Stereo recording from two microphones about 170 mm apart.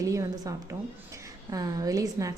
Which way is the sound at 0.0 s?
20° right (ahead or behind).